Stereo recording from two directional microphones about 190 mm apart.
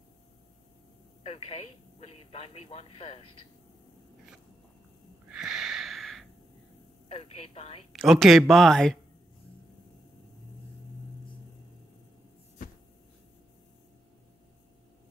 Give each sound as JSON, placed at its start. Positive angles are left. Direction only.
{"t": 1.2, "sound": "speech", "side_deg": 35}
{"t": 5.3, "sound": "a sound", "side_deg": -5}
{"t": 7.1, "sound": "speech", "side_deg": 30}
{"t": 7.9, "sound": "speech", "side_deg": 0}